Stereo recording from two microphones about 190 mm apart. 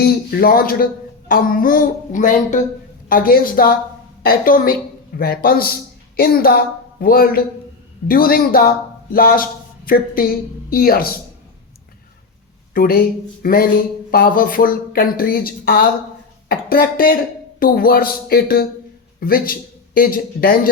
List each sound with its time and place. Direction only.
0.0 s a woman's voice: 55° left (ahead or behind)
12.7 s a man's voice: 50° left (ahead or behind)